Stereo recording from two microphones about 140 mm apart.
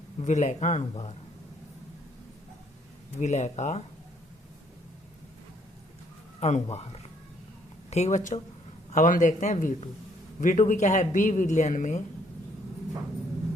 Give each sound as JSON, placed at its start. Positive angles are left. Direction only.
{"t": 0.2, "sound": "speech", "side_deg": 55}
{"t": 3.2, "sound": "speech", "side_deg": 55}
{"t": 6.4, "sound": "speech", "side_deg": 50}